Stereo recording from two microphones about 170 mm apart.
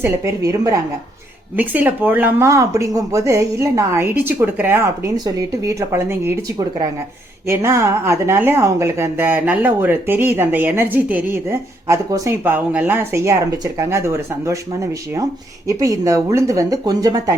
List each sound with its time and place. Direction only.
0.0 s speech: 15° right (ahead or behind)
7.4 s speech: 15° right (ahead or behind)
15.6 s speech: 20° right (ahead or behind)